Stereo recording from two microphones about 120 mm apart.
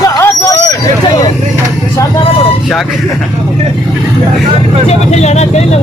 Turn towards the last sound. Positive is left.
turn(degrees=65)  # may be behind; listen again after turning